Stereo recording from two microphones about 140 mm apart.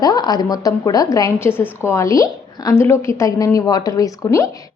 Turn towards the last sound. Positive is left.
turn(degrees=25)  # may be behind; listen again after turning